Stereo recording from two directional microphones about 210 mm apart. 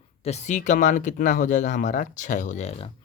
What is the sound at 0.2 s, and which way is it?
A man's voice, 30° left (ahead or behind).